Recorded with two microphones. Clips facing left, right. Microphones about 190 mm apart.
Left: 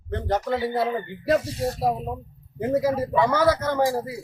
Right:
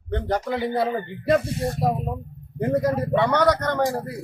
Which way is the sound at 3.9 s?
60° right (ahead or behind).